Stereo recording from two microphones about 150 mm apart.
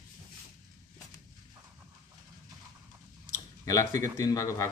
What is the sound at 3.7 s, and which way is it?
A man's voice, 20° left (ahead or behind).